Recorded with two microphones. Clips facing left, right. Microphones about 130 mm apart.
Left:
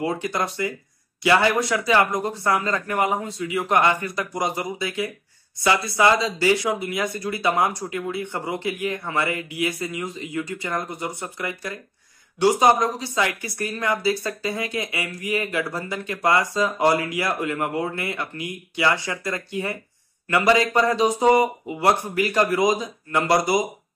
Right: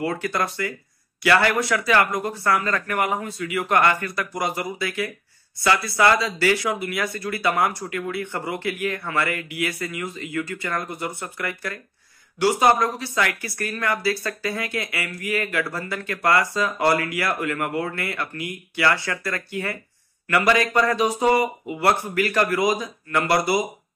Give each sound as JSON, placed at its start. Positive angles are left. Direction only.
{"t": 0.0, "sound": "speech", "side_deg": 20}